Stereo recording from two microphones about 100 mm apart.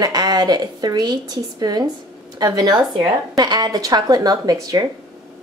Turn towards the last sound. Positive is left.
turn(degrees=-40)  # may be behind; listen again after turning